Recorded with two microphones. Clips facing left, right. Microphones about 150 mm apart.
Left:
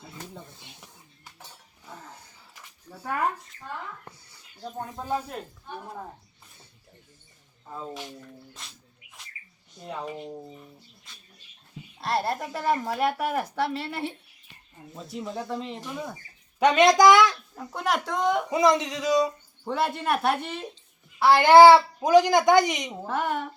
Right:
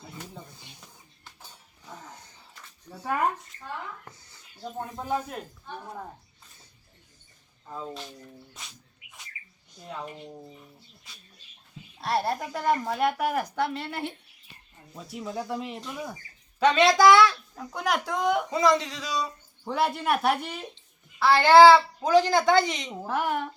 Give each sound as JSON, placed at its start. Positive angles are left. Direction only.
{"t": 0.0, "sound": "a sound", "side_deg": 0}
{"t": 1.8, "sound": "dog", "side_deg": 5}
{"t": 3.0, "sound": "speech", "side_deg": -10}
{"t": 3.4, "sound": "a child's voice", "side_deg": 0}
{"t": 5.6, "sound": "speech", "side_deg": 5}
{"t": 7.7, "sound": "speech", "side_deg": 10}
{"t": 9.0, "sound": "bird", "side_deg": 40}
{"t": 11.9, "sound": "a child's voice", "side_deg": 0}
{"t": 16.6, "sound": "speech", "side_deg": 20}
{"t": 17.5, "sound": "a child's voice", "side_deg": 5}
{"t": 18.5, "sound": "speech", "side_deg": 20}
{"t": 19.6, "sound": "a child's voice", "side_deg": 0}
{"t": 21.2, "sound": "speech", "side_deg": 15}
{"t": 22.9, "sound": "a child's voice", "side_deg": 0}